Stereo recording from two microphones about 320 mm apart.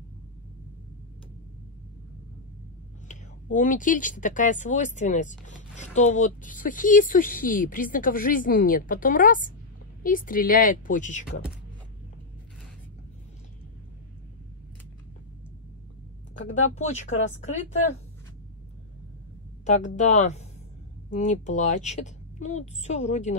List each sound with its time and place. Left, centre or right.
3.1 s speech: left
16.7 s speech: left
20.0 s speech: left